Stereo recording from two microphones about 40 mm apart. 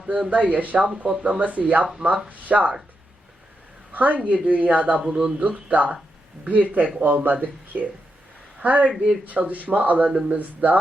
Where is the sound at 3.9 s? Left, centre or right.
Right.